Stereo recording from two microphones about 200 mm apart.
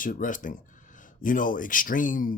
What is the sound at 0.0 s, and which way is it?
Speech, 40° left (ahead or behind).